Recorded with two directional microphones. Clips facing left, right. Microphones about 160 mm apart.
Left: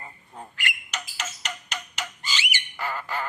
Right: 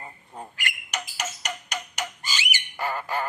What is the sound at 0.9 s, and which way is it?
Tick-tock, 15° right (ahead or behind).